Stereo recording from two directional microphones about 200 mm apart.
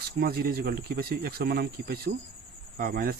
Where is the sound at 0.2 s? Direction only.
50° right (ahead or behind).